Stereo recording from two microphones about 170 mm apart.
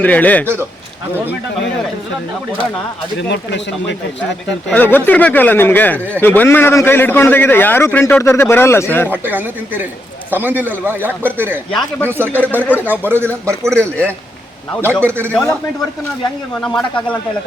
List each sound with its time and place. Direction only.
0.0 s speech: 10° left (ahead or behind)
3.2 s speech: 90° left
4.3 s speech: 10° left (ahead or behind)
9.0 s speech: 10° right (ahead or behind)
11.7 s speech: 5° left (ahead or behind)
12.0 s speech: 15° right (ahead or behind)
12.5 s speech: 10° left (ahead or behind)
13.1 s speech: 15° right (ahead or behind)
15.3 s speech: 5° left (ahead or behind)
16.6 s speech: 5° left (ahead or behind)